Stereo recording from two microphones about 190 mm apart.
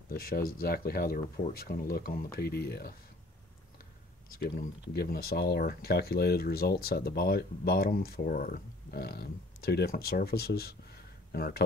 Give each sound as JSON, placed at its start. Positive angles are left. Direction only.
{"t": 0.1, "sound": "speech", "side_deg": 50}
{"t": 4.3, "sound": "speech", "side_deg": 55}